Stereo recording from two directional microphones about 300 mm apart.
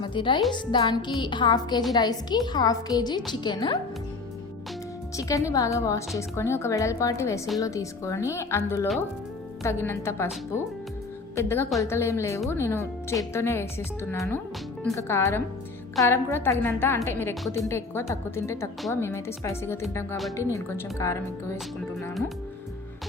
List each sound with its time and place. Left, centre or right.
0.0 s speech: centre
5.1 s speech: centre
11.3 s speech: centre